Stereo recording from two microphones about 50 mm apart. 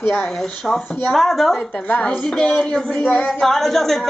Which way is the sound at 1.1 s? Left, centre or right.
Centre.